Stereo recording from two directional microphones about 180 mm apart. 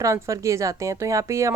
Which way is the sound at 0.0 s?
15° right (ahead or behind).